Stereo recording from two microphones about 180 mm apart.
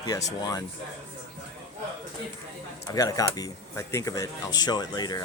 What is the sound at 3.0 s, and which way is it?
Speech, 20° left (ahead or behind).